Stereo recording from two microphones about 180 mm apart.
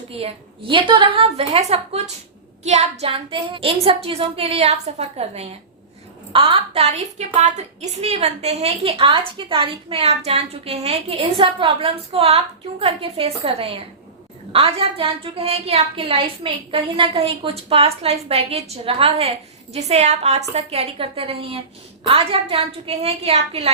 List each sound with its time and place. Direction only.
0.2 s a woman's voice: 30° right (ahead or behind)